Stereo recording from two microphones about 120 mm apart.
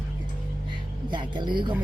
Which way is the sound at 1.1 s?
40° right (ahead or behind).